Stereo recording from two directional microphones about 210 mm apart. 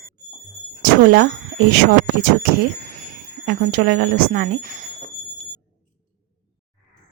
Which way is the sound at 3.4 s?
50° right (ahead or behind).